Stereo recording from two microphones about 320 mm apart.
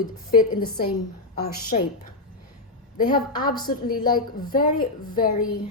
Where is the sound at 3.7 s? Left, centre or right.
Left.